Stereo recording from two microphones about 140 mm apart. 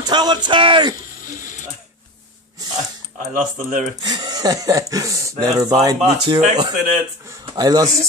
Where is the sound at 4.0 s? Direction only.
30° right (ahead or behind).